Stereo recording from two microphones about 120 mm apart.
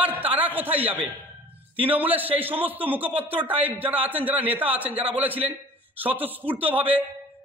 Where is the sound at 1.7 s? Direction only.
50° right (ahead or behind).